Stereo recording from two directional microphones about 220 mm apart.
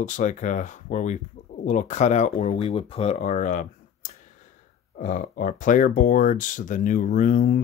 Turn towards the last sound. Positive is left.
turn(degrees=40)  # may be behind; listen again after turning